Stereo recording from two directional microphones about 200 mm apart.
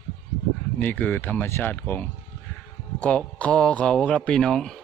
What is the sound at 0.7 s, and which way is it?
Speech, 10° left (ahead or behind).